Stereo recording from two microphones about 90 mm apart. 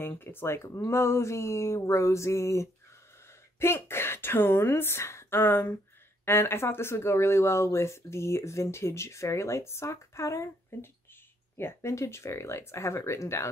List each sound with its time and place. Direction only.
0.2 s a woman's voice: 25° left (ahead or behind)